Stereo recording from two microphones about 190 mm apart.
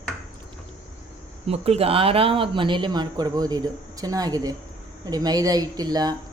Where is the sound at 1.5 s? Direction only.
30° right (ahead or behind).